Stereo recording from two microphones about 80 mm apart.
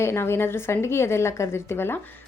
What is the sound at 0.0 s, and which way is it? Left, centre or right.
A woman's voice, left.